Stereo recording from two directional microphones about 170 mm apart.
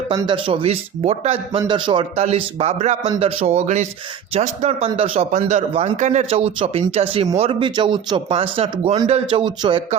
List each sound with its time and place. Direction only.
0.2 s speech: 30° right (ahead or behind)